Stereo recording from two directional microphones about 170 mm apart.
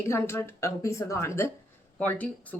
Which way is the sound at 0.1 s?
15° left (ahead or behind).